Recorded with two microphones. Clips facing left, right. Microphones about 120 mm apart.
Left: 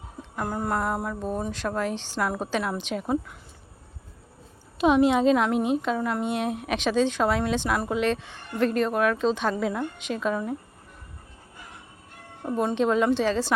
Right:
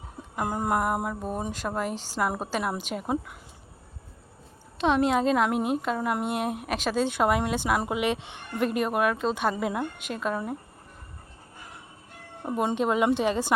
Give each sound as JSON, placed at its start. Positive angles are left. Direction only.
{"t": 0.2, "sound": "speech", "side_deg": -10}
{"t": 4.8, "sound": "a woman's voice", "side_deg": 5}
{"t": 12.4, "sound": "speech", "side_deg": -10}